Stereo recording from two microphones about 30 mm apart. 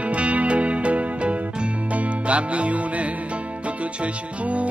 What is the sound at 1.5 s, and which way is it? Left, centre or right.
Music, right.